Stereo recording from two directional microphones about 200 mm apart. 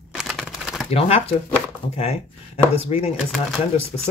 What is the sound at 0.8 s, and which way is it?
Speech, 30° left (ahead or behind).